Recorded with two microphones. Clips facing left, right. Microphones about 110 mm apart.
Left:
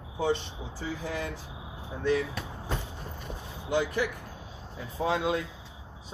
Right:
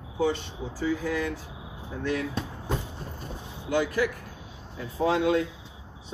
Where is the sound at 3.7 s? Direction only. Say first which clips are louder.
Right 2 dB; 25° left (ahead or behind).